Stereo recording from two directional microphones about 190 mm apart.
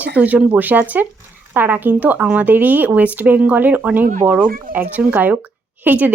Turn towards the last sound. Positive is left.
turn(degrees=-10)  # may be behind; listen again after turning